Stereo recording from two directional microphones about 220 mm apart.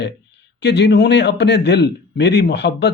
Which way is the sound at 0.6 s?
50° left (ahead or behind).